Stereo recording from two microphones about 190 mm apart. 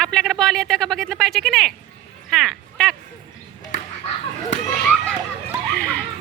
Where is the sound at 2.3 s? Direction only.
Centre (ahead or behind).